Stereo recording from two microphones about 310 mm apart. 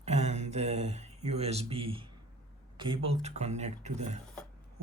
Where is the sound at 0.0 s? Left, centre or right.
Right.